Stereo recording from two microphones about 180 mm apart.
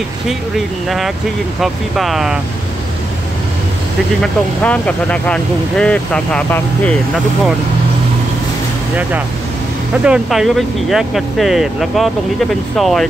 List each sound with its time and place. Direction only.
0.8 s speech: centre (ahead or behind)
4.2 s speech: 5° left (ahead or behind)
10.0 s speech: 5° right (ahead or behind)